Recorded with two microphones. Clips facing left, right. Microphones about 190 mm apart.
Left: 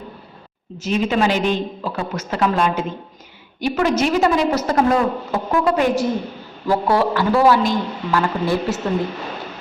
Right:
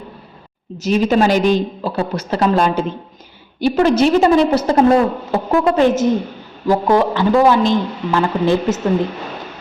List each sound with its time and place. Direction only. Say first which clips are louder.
0.8 s a woman's voice: right 4 dB; 40° right (ahead or behind); by 8.8 s 20° right (ahead or behind)